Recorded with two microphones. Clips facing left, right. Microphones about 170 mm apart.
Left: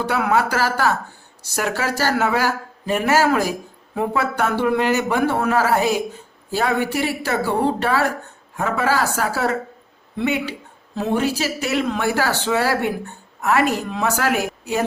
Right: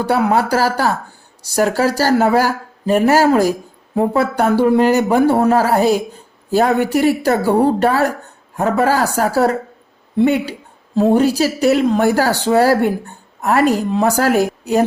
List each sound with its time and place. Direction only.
0.0 s speech: 35° right (ahead or behind)